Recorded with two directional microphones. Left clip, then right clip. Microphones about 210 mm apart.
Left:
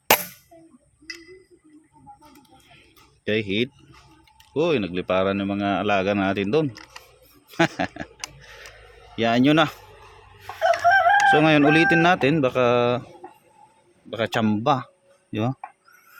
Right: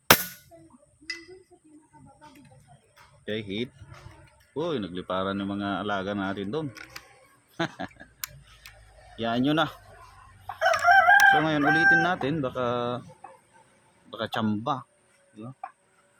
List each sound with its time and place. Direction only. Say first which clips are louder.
3.2 s speech: left 9 dB; 45° left (ahead or behind)
9.1 s speech: left 7 dB; 40° left (ahead or behind)
10.6 s crowing: left 2 dB; 25° right (ahead or behind)
11.3 s speech: left 5 dB; 45° left (ahead or behind)
14.1 s speech: left 6 dB; 30° left (ahead or behind)
14.6 s speech: left 8 dB; 40° left (ahead or behind)